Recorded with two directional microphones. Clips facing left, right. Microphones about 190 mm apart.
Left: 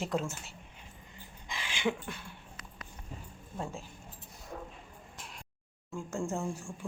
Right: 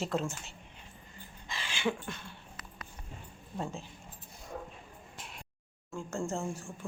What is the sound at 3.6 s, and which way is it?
Speech, 10° left (ahead or behind).